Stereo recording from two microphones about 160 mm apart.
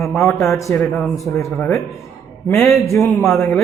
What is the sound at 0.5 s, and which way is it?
Speech, 20° left (ahead or behind).